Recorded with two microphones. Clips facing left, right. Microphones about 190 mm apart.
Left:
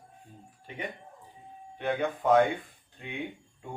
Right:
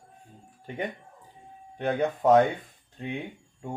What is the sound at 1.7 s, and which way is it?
Speech, 40° right (ahead or behind).